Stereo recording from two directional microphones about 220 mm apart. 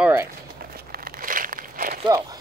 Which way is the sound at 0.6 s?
45° right (ahead or behind).